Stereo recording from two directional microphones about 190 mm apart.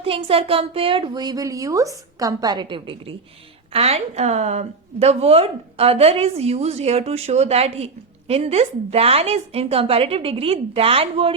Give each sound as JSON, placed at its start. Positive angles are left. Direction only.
{"t": 0.0, "sound": "a woman's voice", "side_deg": -30}